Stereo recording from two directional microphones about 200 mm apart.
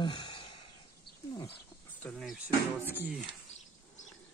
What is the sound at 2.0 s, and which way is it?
Speech, centre (ahead or behind).